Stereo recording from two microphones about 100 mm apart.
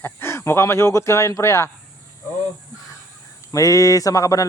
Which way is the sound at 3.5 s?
35° left (ahead or behind).